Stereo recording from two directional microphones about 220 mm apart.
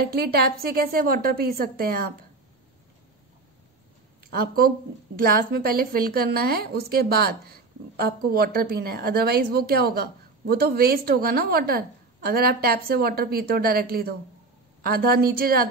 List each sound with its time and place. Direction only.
0.0 s a woman's voice: 45° right (ahead or behind)
4.3 s a woman's voice: 40° right (ahead or behind)